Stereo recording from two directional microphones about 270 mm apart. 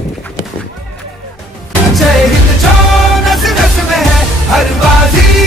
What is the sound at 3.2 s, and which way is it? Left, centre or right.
Music, centre.